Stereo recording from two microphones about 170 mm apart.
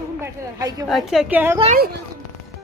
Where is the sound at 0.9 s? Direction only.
Centre (ahead or behind).